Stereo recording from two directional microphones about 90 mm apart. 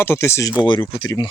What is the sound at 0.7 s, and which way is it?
Speech, 55° left (ahead or behind).